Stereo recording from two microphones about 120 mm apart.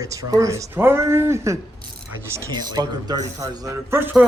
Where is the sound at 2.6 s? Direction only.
35° right (ahead or behind).